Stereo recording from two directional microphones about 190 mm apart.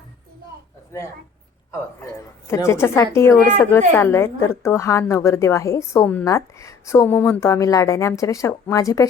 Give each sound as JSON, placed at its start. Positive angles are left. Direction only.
{"t": 0.9, "sound": "a woman's voice", "side_deg": 15}
{"t": 2.5, "sound": "a woman's voice", "side_deg": 15}